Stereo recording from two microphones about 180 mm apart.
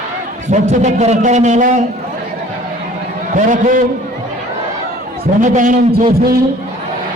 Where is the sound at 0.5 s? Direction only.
40° right (ahead or behind).